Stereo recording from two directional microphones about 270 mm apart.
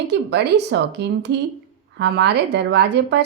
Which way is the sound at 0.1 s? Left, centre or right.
Right.